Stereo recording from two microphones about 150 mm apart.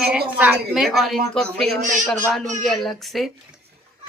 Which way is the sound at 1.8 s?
60° right (ahead or behind).